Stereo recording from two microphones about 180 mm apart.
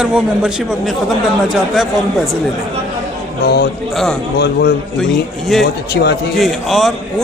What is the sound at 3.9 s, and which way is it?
Speech, centre (ahead or behind).